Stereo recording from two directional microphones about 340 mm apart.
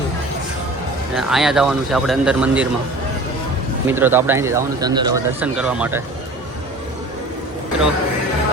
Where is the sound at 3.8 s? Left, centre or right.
Centre.